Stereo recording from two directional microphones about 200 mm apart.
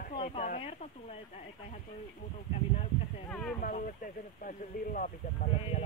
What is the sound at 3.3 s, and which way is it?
Speech, 5° left (ahead or behind).